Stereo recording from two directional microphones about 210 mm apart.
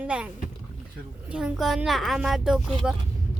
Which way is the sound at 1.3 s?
Centre (ahead or behind).